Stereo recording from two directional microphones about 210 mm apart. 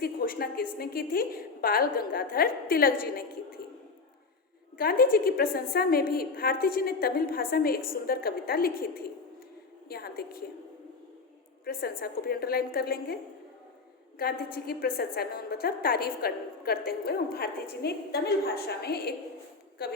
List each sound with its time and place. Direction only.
0.0 s a woman's voice: 45° left (ahead or behind)
4.8 s a woman's voice: 45° left (ahead or behind)
11.6 s a woman's voice: 45° left (ahead or behind)
14.2 s a woman's voice: 45° left (ahead or behind)